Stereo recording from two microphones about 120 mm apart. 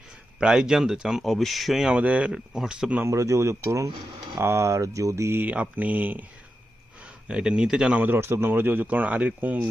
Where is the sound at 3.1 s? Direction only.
25° right (ahead or behind).